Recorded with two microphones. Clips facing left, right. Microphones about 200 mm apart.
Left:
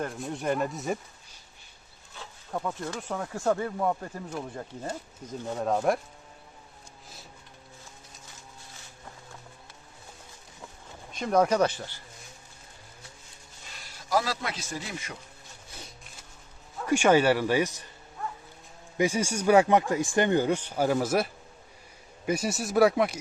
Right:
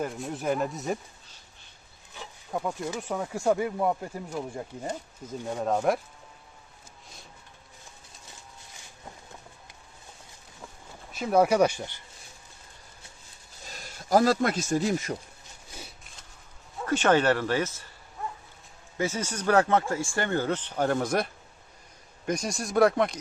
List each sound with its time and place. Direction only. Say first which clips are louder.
0.0 s speech: right 1 dB; centre (ahead or behind)
2.1 s speech: right 2 dB; 10° right (ahead or behind)
5.5 s speech: even; centre (ahead or behind)
11.1 s speech: right 1 dB; 5° right (ahead or behind)
13.7 s a man's voice: right 5 dB; 45° right (ahead or behind)
16.8 s speech: left 1 dB; 10° left (ahead or behind)
18.9 s speech: left 4 dB; 15° left (ahead or behind)